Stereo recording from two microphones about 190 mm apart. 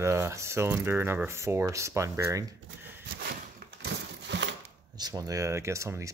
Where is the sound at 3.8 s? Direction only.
65° right (ahead or behind).